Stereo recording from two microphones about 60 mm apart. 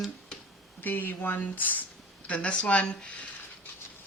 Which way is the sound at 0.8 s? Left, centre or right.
Left.